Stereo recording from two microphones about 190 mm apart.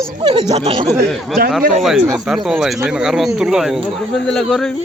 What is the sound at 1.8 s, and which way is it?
Speech, centre (ahead or behind).